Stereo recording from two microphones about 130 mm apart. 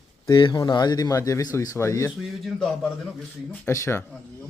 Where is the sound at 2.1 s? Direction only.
Centre (ahead or behind).